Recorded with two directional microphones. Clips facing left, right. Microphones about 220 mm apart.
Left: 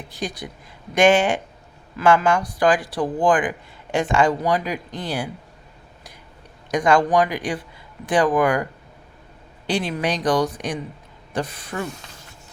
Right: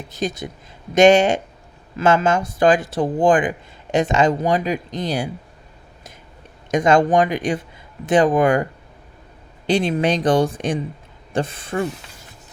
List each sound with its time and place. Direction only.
0.2 s speech: 25° right (ahead or behind)
6.7 s speech: 25° right (ahead or behind)
9.6 s speech: 25° right (ahead or behind)